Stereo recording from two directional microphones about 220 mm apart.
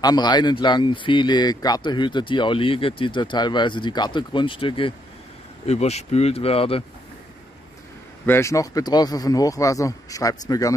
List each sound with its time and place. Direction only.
0.0 s speech: 20° left (ahead or behind)
8.3 s speech: 15° left (ahead or behind)